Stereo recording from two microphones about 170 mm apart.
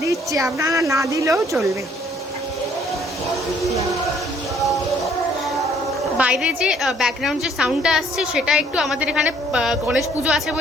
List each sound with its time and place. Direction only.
0.0 s a sound: 20° right (ahead or behind)
0.6 s speech: 20° right (ahead or behind)
4.6 s music: centre (ahead or behind)
6.1 s a woman's voice: 5° right (ahead or behind)